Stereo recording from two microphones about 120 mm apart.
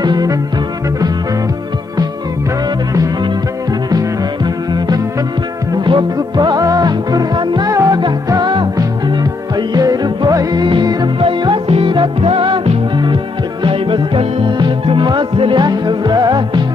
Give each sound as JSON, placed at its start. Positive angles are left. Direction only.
{"t": 0.0, "sound": "music", "side_deg": -35}
{"t": 2.9, "sound": "music", "side_deg": -30}
{"t": 4.7, "sound": "music", "side_deg": -35}